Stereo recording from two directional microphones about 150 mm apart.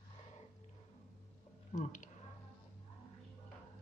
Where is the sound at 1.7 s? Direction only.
55° left (ahead or behind).